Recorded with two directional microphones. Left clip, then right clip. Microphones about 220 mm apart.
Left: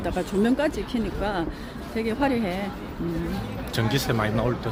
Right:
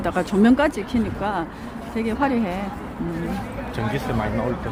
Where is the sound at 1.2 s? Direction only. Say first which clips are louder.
Right 2 dB; 5° right (ahead or behind).